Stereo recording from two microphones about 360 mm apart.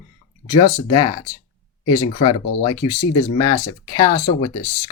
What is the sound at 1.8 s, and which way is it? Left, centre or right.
Speech, left.